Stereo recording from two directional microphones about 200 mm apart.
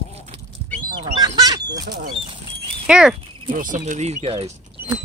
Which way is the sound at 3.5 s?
40° right (ahead or behind).